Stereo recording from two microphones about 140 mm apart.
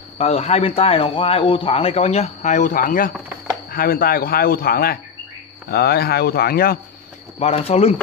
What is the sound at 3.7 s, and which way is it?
Speech, 90° left.